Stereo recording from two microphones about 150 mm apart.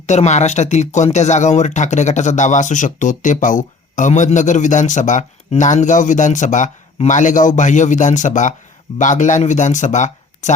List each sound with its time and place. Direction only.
0.0 s speech: 50° left (ahead or behind)